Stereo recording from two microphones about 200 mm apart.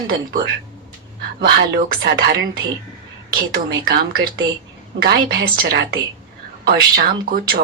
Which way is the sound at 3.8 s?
50° right (ahead or behind).